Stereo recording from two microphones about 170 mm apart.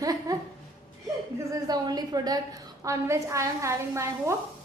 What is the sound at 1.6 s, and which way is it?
A woman's voice, 25° right (ahead or behind).